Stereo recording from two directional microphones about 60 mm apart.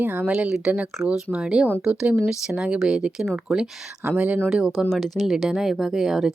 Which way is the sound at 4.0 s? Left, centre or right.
Right.